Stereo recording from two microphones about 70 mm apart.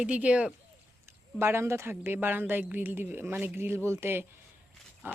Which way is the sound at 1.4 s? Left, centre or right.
Right.